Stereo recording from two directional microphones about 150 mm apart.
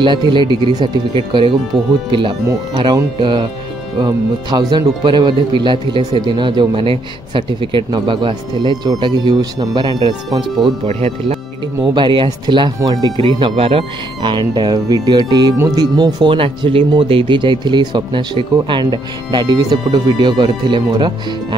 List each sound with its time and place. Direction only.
0.0 s speech: 30° right (ahead or behind)
10.9 s speech: 45° right (ahead or behind)
11.8 s speech: 30° right (ahead or behind)